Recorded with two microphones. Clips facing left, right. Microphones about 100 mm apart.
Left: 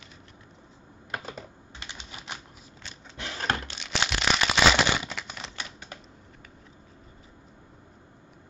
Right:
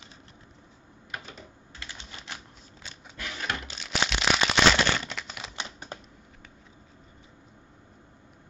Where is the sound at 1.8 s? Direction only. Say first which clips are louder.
Left 1 dB; 15° left (ahead or behind).